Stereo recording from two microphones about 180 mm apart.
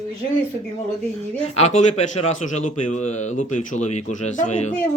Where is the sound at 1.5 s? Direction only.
40° left (ahead or behind).